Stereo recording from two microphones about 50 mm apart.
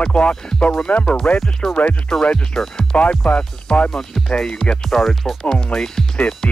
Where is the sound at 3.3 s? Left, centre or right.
Left.